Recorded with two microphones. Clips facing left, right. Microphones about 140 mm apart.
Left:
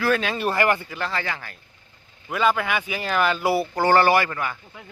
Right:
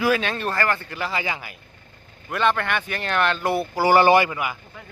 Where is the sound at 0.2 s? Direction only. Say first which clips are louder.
Left 2 dB; 5° left (ahead or behind).